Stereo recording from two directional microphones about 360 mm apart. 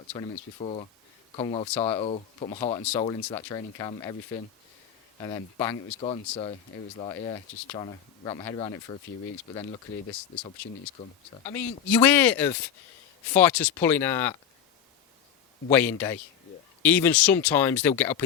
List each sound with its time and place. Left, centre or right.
0.1 s speech: centre
5.2 s speech: centre
10.6 s speech: centre
15.7 s speech: centre